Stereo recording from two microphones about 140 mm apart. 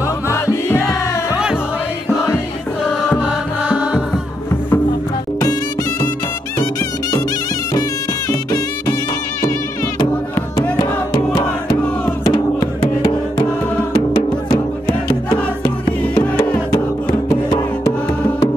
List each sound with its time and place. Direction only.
0.3 s music: 20° left (ahead or behind)
1.3 s music: 5° right (ahead or behind)
3.2 s music: 10° right (ahead or behind)
5.4 s music: 25° left (ahead or behind)
8.3 s music: 25° left (ahead or behind)
10.8 s music: 30° left (ahead or behind)
17.3 s music: 25° left (ahead or behind)